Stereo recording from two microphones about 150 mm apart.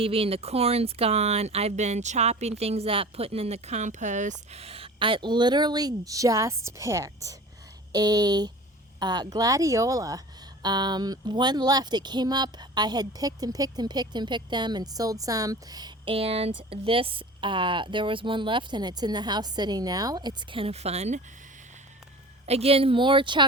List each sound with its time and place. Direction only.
0.0 s speech: 40° right (ahead or behind)
16.1 s speech: 40° right (ahead or behind)
22.4 s speech: 45° right (ahead or behind)